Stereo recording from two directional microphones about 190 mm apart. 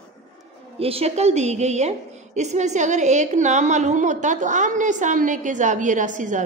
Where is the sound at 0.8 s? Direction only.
30° right (ahead or behind).